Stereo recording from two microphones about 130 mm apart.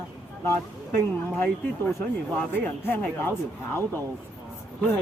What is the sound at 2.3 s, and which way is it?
Speech, 15° left (ahead or behind).